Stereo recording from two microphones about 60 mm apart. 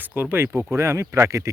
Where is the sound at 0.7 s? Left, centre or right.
Right.